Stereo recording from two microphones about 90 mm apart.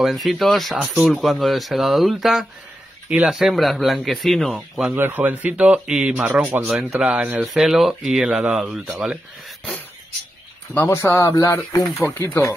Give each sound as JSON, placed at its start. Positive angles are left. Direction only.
{"t": 0.0, "sound": "speech", "side_deg": 0}
{"t": 4.9, "sound": "speech", "side_deg": -20}
{"t": 10.7, "sound": "speech", "side_deg": 25}
{"t": 12.0, "sound": "speech", "side_deg": 25}